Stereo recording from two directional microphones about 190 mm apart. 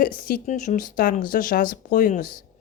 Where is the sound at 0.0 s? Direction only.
50° left (ahead or behind).